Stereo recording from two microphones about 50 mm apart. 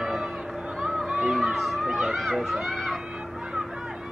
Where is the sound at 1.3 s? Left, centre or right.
Centre.